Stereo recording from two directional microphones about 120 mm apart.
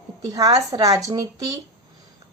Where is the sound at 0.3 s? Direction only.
30° right (ahead or behind).